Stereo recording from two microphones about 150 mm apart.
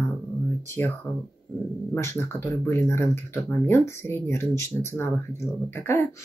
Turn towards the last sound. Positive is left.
turn(degrees=15)  # may be behind; listen again after turning